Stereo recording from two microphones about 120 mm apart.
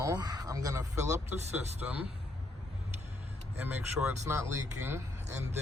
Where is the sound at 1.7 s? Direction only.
15° right (ahead or behind).